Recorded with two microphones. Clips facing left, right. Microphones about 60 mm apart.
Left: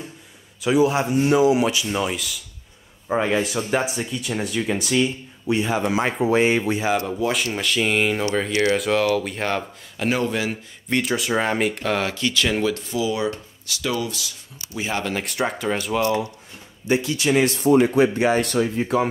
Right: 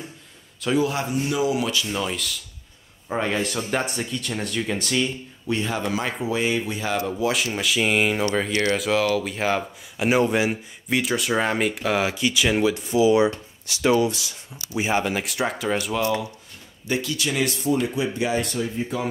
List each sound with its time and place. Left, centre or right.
0.6 s a man's voice: centre
1.1 s speech: left
1.5 s speech: left
6.2 s speech: left
7.1 s speech: centre
10.9 s speech: centre
15.1 s speech: centre
16.8 s speech: left
18.5 s speech: left